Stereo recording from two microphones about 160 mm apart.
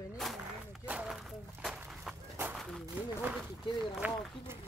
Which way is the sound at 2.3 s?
10° right (ahead or behind).